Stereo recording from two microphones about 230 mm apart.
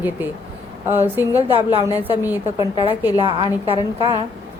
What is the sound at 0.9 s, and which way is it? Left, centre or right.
A woman's voice, centre.